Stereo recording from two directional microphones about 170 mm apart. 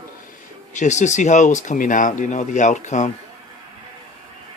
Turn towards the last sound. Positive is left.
turn(degrees=45)  # may be behind; listen again after turning